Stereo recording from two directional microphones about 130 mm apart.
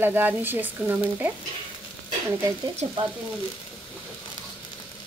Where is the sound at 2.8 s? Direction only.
60° right (ahead or behind).